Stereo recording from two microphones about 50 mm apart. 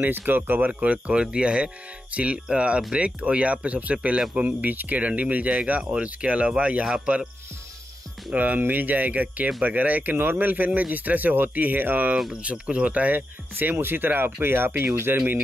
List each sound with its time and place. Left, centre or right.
0.0 s speech: right; by 7.2 s centre
8.4 s speech: right
13.6 s speech: right